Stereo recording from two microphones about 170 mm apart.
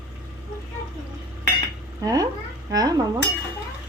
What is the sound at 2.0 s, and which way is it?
Speech, 20° right (ahead or behind).